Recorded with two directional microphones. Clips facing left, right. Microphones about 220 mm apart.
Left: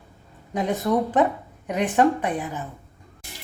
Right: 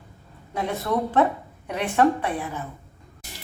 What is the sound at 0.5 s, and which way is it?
Speech, 15° left (ahead or behind).